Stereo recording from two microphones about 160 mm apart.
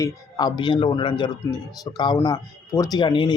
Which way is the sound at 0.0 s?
25° left (ahead or behind).